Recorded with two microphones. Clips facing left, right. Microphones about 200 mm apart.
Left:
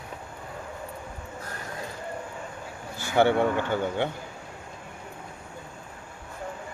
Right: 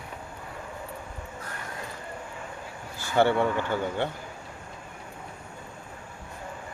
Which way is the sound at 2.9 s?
15° left (ahead or behind).